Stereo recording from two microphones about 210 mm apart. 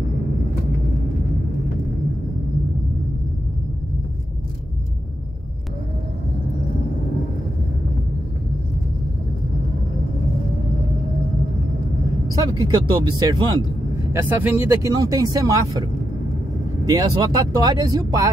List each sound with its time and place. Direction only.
12.5 s speech: 20° right (ahead or behind)
14.1 s speech: 10° right (ahead or behind)
16.8 s speech: 20° right (ahead or behind)